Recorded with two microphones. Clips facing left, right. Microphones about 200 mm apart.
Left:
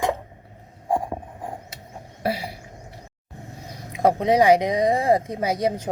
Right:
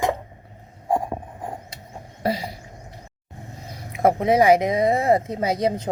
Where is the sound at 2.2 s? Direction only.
10° left (ahead or behind).